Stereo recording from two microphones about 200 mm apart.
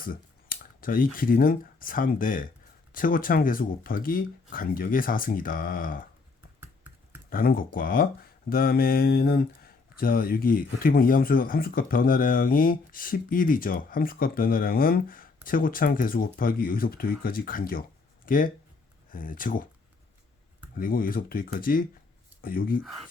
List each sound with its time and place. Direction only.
0.0 s speech: 45° left (ahead or behind)
7.3 s speech: 45° left (ahead or behind)
20.7 s speech: 45° left (ahead or behind)